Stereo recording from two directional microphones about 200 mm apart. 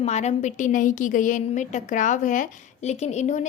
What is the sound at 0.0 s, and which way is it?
A woman's voice, 35° left (ahead or behind).